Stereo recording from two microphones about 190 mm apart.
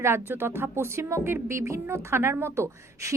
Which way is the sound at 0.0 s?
10° right (ahead or behind).